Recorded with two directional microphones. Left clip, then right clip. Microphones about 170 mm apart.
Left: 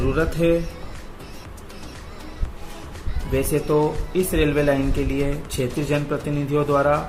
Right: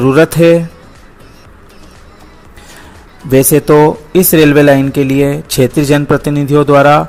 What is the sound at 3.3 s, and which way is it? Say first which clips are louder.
Speech: right 14 dB; 55° right (ahead or behind).